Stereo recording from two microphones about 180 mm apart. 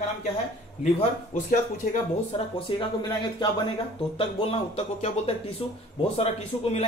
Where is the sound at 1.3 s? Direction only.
45° left (ahead or behind).